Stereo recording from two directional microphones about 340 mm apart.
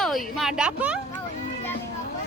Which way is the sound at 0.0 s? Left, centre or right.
Centre.